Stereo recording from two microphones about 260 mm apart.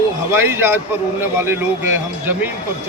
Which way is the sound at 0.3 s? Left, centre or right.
Centre.